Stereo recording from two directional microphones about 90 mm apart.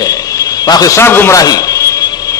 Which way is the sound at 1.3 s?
45° left (ahead or behind).